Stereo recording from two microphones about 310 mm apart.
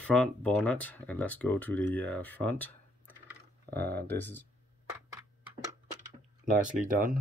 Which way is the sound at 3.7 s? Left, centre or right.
Centre.